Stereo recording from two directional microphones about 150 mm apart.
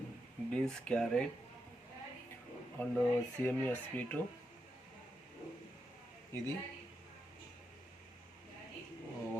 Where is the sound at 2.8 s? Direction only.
10° left (ahead or behind).